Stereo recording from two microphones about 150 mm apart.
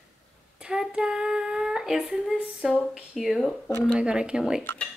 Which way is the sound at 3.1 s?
Centre (ahead or behind).